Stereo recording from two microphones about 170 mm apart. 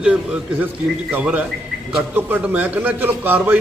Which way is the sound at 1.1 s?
10° right (ahead or behind).